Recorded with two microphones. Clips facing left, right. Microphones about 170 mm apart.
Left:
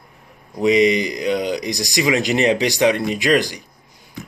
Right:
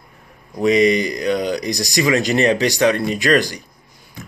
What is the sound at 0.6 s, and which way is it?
Speech, 20° left (ahead or behind).